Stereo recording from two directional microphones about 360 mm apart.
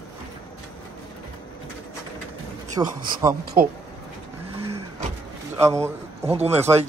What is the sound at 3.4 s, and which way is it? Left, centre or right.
Speech, right.